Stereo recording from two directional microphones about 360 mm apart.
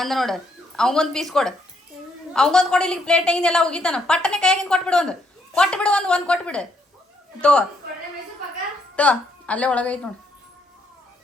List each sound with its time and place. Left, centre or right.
0.0 s a woman's voice: centre
9.0 s speech: centre